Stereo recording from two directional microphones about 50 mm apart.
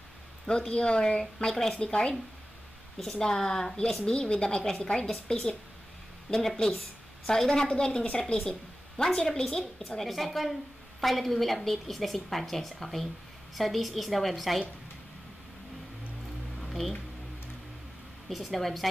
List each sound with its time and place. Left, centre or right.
0.5 s a woman's voice: centre
16.6 s music: centre
18.3 s a woman's voice: centre